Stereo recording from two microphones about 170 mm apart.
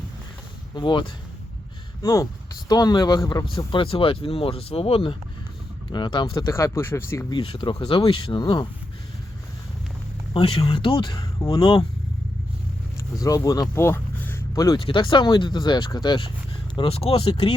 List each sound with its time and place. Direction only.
0.8 s speech: 25° left (ahead or behind)
7.3 s speech: 30° left (ahead or behind)
10.3 s speech: 35° left (ahead or behind)
13.1 s speech: 20° left (ahead or behind)